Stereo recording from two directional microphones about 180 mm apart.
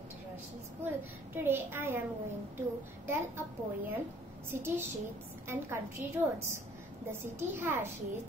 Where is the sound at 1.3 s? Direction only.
10° right (ahead or behind).